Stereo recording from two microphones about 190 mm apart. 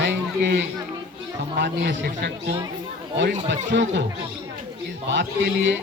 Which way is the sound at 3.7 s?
65° right (ahead or behind).